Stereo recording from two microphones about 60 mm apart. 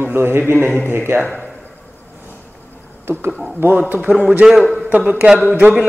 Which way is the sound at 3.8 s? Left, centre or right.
Right.